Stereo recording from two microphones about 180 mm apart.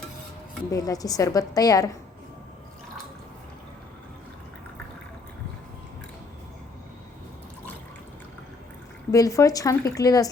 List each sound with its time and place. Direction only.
0.7 s a woman's voice: 20° left (ahead or behind)
9.1 s a woman's voice: 20° left (ahead or behind)